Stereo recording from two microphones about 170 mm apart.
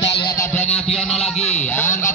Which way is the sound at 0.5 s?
40° left (ahead or behind).